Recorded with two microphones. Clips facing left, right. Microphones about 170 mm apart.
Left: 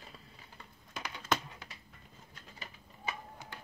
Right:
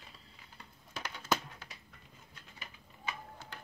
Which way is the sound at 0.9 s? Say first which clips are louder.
Even; 5° right (ahead or behind).